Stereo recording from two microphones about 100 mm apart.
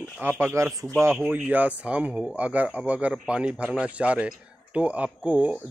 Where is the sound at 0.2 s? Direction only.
20° right (ahead or behind).